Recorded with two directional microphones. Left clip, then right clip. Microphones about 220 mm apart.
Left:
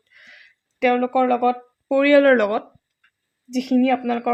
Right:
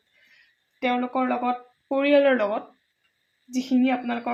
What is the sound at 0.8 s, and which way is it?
Speech, 45° left (ahead or behind).